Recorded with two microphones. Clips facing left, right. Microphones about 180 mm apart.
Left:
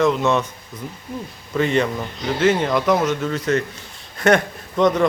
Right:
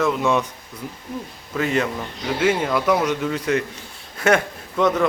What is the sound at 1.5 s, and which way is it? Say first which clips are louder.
A man's voice: left 3 dB; 5° right (ahead or behind).